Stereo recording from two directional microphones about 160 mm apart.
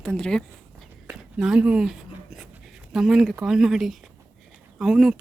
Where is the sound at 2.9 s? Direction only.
Centre (ahead or behind).